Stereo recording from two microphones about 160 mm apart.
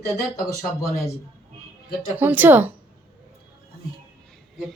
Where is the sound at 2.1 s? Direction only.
10° right (ahead or behind).